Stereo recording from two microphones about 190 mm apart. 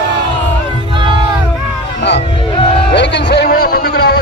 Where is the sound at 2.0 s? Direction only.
65° left (ahead or behind).